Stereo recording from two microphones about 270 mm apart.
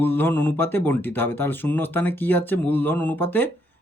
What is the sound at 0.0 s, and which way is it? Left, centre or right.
Speech, centre.